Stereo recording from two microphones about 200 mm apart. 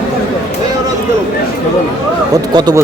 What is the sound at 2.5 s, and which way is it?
Speech, 20° right (ahead or behind).